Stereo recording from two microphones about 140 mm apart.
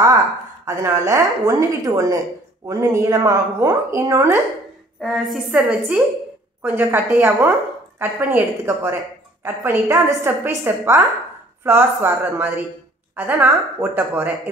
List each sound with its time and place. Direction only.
0.7 s a woman's voice: 20° right (ahead or behind)
5.0 s a woman's voice: centre (ahead or behind); by 14.3 s 15° right (ahead or behind)